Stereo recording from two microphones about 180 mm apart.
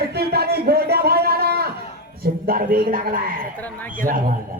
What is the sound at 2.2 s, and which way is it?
A man's voice, 55° right (ahead or behind).